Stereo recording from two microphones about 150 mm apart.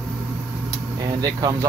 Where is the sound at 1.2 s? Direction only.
25° right (ahead or behind).